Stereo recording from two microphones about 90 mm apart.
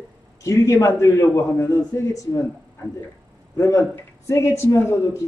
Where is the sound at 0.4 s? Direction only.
35° left (ahead or behind).